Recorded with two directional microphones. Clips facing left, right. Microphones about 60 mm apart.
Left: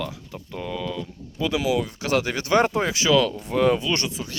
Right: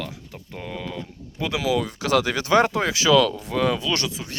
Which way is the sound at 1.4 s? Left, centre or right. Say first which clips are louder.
Even; right.